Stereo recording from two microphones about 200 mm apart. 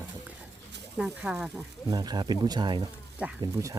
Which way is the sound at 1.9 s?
20° right (ahead or behind).